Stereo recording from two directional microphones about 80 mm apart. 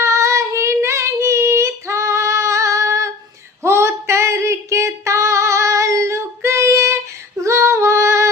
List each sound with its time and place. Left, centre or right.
0.0 s child singing: right
3.6 s female singing: right